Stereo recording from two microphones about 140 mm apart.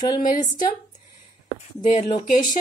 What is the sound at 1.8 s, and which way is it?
Speech, 65° left (ahead or behind).